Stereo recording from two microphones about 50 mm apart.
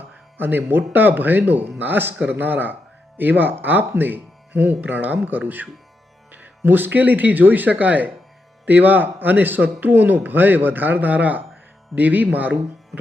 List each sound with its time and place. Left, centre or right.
0.3 s a man's voice: right
6.6 s a man's voice: right